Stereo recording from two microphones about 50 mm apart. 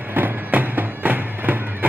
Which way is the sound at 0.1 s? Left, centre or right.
Right.